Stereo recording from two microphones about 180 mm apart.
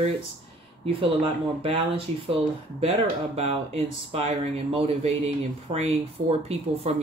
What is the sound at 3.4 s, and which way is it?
Speech, 35° right (ahead or behind).